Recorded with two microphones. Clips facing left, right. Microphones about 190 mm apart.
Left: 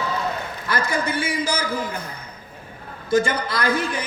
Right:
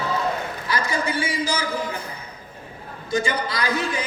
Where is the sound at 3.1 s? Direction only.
55° left (ahead or behind).